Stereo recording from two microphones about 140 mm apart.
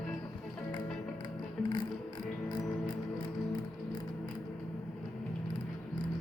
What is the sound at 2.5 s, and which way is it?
Music, 30° left (ahead or behind).